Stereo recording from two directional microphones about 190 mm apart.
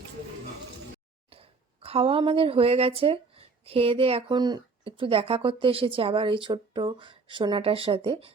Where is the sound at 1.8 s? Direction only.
30° right (ahead or behind).